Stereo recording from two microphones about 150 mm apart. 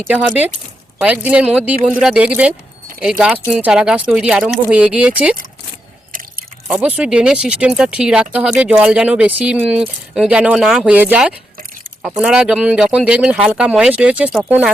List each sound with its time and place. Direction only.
0.1 s speech: 10° right (ahead or behind)
6.7 s speech: 10° right (ahead or behind)